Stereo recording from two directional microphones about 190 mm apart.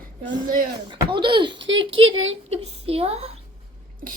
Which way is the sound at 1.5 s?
80° right.